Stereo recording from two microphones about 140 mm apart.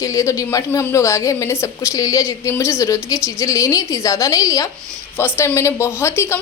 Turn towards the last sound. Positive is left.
turn(degrees=20)  # may be behind; listen again after turning